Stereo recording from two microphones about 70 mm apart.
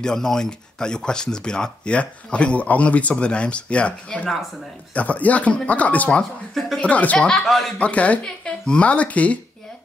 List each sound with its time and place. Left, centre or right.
0.0 s speech: centre
7.2 s speech: centre
7.8 s speech: centre